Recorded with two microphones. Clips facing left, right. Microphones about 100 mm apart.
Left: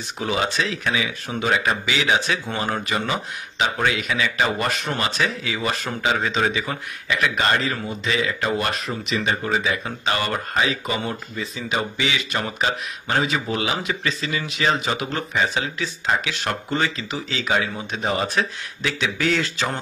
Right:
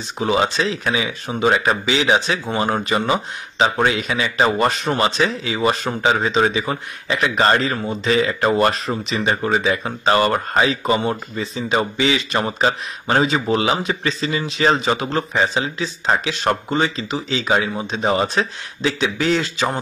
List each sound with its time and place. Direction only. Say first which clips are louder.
0.2 s speech: right 5 dB; 25° right (ahead or behind)
16.1 s speech: right 5 dB; 35° right (ahead or behind)
16.6 s speech: right 4 dB; 25° right (ahead or behind)